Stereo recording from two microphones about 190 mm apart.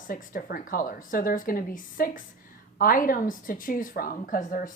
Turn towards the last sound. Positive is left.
turn(degrees=45)  # may be behind; listen again after turning